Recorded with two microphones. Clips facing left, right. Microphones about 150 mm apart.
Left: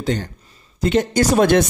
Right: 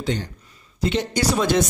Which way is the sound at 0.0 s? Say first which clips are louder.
Left 3 dB; 45° left (ahead or behind).